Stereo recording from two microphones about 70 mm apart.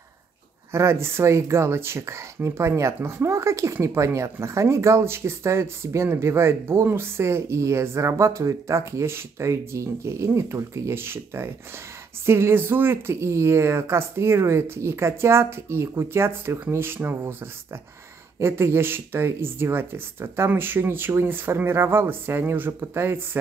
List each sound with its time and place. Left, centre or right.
0.7 s speech: right
18.4 s speech: right